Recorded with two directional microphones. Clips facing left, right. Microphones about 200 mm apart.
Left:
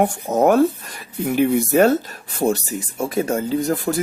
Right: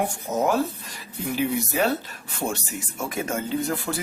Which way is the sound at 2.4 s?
35° left (ahead or behind).